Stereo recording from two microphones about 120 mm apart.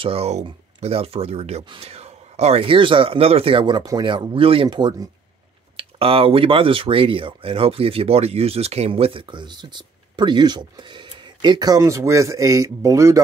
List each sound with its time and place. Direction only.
0.0 s speech: 55° right (ahead or behind); by 5.0 s 40° right (ahead or behind)
5.8 s speech: 50° right (ahead or behind); by 13.2 s 25° right (ahead or behind)